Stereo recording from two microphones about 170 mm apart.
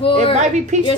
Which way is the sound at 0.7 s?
45° right (ahead or behind).